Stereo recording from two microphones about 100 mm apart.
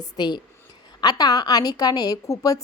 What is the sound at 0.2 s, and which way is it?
A woman's voice, 50° left (ahead or behind).